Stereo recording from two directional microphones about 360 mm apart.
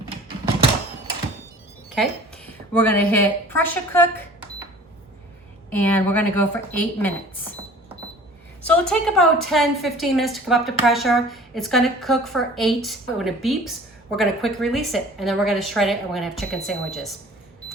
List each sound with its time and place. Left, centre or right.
1.9 s a woman's voice: centre
5.7 s a woman's voice: centre
8.6 s a woman's voice: centre